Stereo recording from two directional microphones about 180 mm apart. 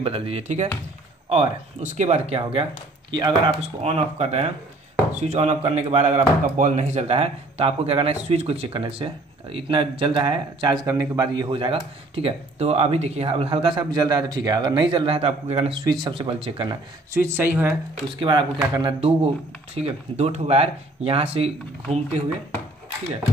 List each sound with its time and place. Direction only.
0.0 s speech: 30° right (ahead or behind)
17.1 s speech: 10° right (ahead or behind)
18.2 s speech: 25° right (ahead or behind)